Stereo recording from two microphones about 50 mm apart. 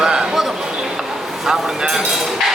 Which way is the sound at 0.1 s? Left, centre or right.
Centre.